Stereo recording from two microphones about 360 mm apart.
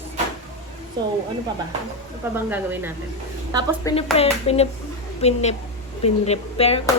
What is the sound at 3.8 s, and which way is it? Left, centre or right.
Speech, centre.